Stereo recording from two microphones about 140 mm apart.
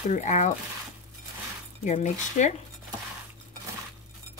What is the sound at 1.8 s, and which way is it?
Speech, 55° left (ahead or behind).